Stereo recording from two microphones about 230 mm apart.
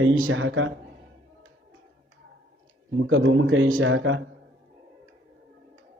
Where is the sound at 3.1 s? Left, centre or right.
Right.